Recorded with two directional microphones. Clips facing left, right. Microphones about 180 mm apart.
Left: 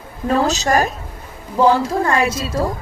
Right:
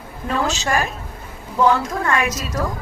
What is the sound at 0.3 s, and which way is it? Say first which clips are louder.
A woman's voice: left 5 dB; 40° left (ahead or behind).